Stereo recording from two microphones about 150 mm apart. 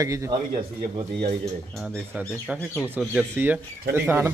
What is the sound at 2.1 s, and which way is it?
Speech, 10° right (ahead or behind).